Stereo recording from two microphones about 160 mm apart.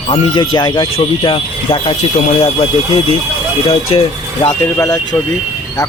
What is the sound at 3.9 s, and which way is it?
Speech, 35° left (ahead or behind).